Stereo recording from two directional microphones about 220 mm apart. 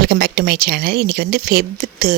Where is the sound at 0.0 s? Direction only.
45° right (ahead or behind).